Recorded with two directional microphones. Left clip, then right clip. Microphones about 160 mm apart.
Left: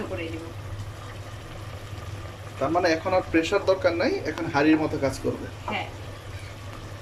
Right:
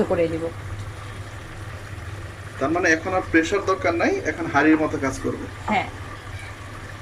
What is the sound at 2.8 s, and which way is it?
Speech, 10° left (ahead or behind).